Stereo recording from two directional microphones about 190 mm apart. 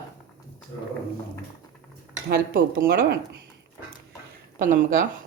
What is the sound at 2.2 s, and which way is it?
Dishes, 50° right (ahead or behind).